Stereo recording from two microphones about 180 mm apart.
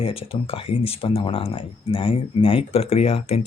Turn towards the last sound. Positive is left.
turn(degrees=35)  # may be behind; listen again after turning